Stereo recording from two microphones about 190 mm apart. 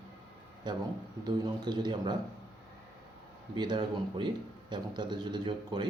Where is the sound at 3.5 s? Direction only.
20° right (ahead or behind).